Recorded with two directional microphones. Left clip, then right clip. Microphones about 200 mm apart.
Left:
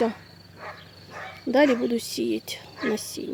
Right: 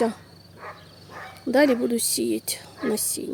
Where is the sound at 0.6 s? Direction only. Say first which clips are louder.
Even; 50° left (ahead or behind).